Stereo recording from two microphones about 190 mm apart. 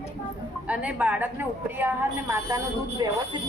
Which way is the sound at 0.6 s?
5° right (ahead or behind).